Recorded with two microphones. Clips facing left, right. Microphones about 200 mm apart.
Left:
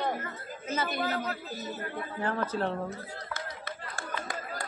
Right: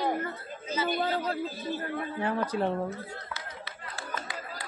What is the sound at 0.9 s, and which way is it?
Speech, 30° right (ahead or behind).